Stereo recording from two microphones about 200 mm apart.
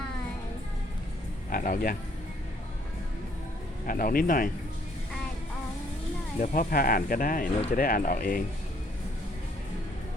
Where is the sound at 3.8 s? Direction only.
45° left (ahead or behind).